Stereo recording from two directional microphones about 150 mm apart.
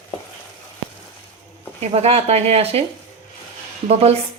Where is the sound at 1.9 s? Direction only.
40° right (ahead or behind).